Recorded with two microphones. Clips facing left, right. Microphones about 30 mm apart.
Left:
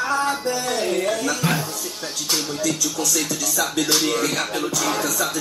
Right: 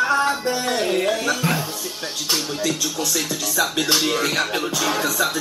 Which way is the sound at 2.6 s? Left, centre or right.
Right.